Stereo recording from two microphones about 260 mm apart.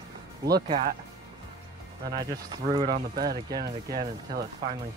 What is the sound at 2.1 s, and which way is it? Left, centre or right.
Speech, centre.